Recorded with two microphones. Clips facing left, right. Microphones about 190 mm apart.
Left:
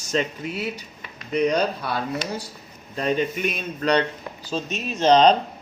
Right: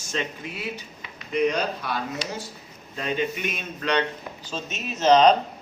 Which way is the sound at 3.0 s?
40° left (ahead or behind).